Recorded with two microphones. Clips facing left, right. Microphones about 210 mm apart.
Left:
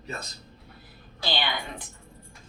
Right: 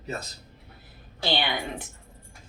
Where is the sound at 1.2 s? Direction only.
25° right (ahead or behind).